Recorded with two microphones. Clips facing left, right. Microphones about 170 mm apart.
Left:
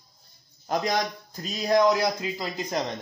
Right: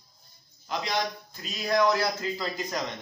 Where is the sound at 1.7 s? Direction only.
20° left (ahead or behind).